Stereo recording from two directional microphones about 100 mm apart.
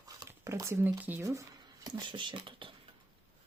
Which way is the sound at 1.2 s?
30° right (ahead or behind).